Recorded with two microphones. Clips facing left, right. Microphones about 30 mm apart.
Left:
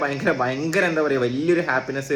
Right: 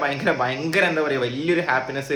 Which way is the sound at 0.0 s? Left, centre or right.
Right.